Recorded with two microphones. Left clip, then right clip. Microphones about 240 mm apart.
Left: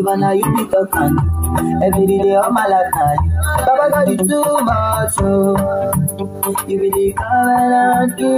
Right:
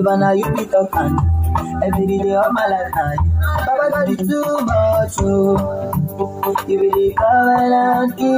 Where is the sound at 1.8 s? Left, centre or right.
Left.